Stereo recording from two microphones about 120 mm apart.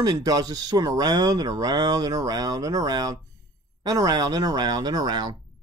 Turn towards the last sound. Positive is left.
turn(degrees=-35)  # may be behind; listen again after turning